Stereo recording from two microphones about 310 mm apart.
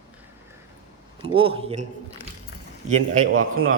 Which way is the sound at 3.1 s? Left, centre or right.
Right.